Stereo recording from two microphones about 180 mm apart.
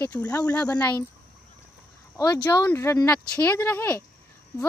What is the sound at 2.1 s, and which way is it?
Speech, 20° left (ahead or behind).